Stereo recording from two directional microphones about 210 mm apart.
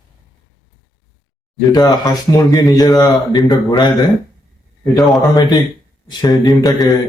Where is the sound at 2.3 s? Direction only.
15° left (ahead or behind).